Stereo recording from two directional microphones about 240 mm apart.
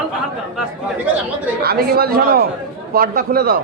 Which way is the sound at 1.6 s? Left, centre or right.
Right.